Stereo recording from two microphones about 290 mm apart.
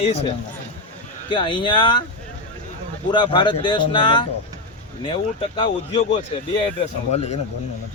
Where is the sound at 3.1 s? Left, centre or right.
Centre.